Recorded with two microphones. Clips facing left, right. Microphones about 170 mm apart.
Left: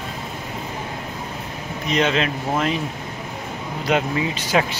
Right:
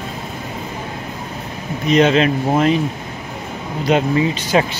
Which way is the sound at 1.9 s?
40° right (ahead or behind).